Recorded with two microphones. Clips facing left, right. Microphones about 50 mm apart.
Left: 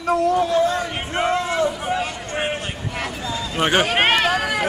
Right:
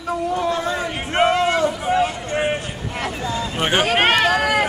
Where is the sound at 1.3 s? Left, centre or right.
Right.